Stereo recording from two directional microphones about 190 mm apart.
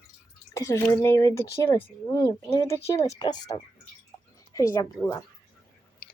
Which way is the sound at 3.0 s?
30° left (ahead or behind).